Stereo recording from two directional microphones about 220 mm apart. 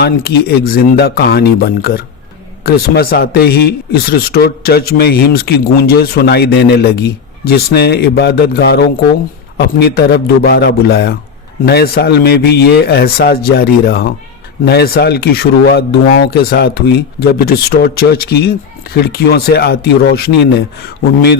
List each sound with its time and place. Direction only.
0.0 s speech: 45° left (ahead or behind)